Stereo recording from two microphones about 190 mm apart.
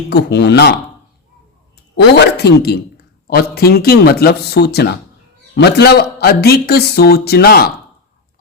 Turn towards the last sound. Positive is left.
turn(degrees=55)  # may be behind; listen again after turning